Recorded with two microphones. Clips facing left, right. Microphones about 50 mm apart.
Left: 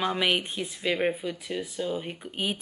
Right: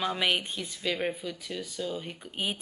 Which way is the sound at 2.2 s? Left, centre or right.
Centre.